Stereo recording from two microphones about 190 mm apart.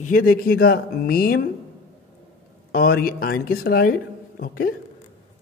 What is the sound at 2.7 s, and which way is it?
A woman's voice, 50° left (ahead or behind).